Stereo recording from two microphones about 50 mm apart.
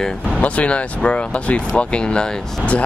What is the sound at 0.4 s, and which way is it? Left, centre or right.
Speech, left.